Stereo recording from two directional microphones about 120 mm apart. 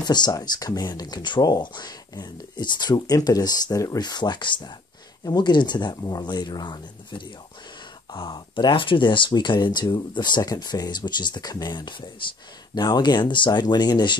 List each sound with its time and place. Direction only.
0.0 s speech: 35° left (ahead or behind)